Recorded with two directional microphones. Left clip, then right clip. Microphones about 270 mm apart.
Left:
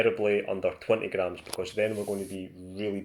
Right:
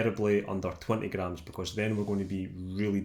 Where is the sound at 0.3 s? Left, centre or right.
Centre.